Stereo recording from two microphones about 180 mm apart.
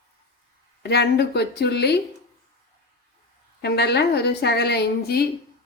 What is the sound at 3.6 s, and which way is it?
Speech, 65° left (ahead or behind).